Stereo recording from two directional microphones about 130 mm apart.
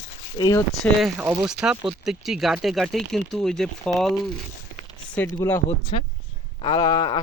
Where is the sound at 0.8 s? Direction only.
15° left (ahead or behind).